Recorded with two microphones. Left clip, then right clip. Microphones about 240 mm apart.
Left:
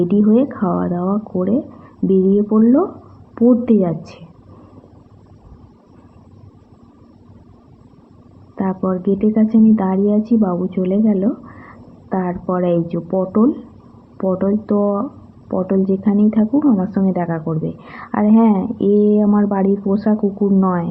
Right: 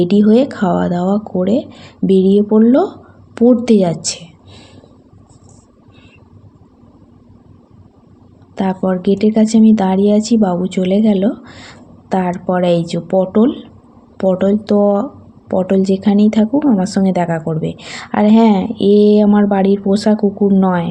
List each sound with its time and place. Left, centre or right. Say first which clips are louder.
0.0 s speech: right 4 dB; right
8.5 s speech: right 4 dB; right